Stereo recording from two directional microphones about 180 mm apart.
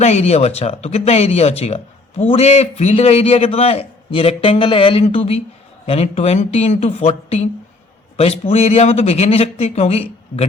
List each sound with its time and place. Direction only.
0.0 s speech: 35° left (ahead or behind)